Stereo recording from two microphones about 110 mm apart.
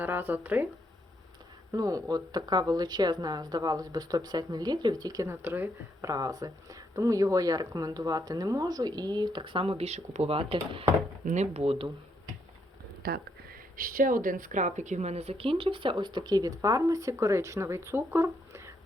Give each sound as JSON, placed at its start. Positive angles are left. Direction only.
{"t": 0.0, "sound": "speech", "side_deg": -20}
{"t": 1.7, "sound": "speech", "side_deg": -35}
{"t": 6.1, "sound": "speech", "side_deg": -35}
{"t": 11.3, "sound": "speech", "side_deg": -70}
{"t": 14.8, "sound": "speech", "side_deg": -90}